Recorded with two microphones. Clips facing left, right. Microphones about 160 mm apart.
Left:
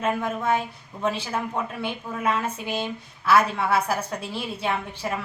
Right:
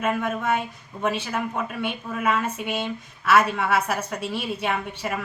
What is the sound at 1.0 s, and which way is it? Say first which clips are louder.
A woman's voice: right 1 dB; 30° left (ahead or behind).